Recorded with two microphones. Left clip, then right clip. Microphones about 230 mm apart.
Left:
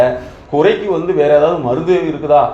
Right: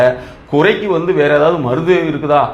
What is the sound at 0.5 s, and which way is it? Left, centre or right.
A man's voice, right.